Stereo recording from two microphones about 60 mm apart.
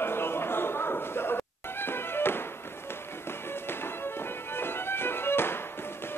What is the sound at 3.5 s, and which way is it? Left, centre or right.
Music, left.